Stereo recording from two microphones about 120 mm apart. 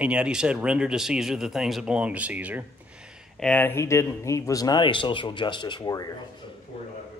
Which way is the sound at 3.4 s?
15° left (ahead or behind).